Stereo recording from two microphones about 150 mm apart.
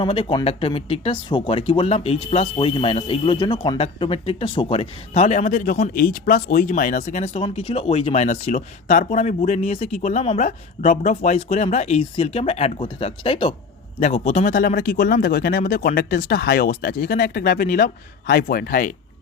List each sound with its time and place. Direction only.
0.0 s speech: 35° left (ahead or behind)
14.0 s speech: 50° left (ahead or behind); by 18.9 s 70° left (ahead or behind)